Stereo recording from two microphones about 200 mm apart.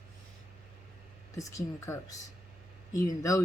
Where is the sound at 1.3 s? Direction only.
15° left (ahead or behind).